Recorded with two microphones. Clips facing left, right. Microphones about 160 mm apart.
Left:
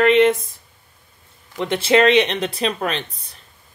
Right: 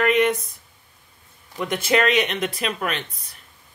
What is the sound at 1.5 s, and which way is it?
Speech, 25° left (ahead or behind).